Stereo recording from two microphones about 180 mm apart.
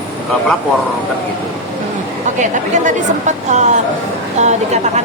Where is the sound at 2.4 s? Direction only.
40° right (ahead or behind).